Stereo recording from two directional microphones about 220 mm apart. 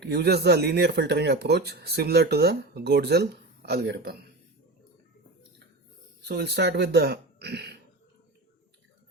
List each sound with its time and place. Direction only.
0.0 s speech: 50° right (ahead or behind)
6.2 s speech: 50° right (ahead or behind)